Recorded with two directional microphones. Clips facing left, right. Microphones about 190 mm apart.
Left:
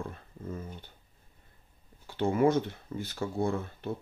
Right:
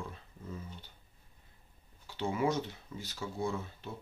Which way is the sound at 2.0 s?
55° left (ahead or behind).